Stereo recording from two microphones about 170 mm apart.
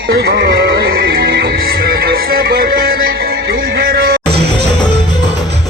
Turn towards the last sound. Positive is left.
turn(degrees=-60)  # may be behind; listen again after turning